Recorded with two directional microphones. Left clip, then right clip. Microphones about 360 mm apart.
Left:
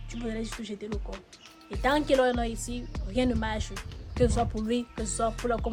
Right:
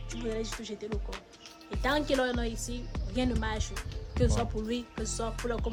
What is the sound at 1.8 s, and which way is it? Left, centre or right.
Speech, centre.